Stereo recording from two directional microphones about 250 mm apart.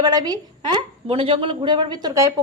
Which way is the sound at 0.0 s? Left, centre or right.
Centre.